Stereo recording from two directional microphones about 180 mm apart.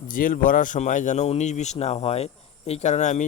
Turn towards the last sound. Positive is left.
turn(degrees=40)  # may be behind; listen again after turning